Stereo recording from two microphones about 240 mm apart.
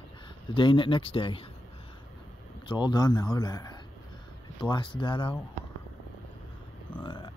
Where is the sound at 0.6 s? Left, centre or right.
Centre.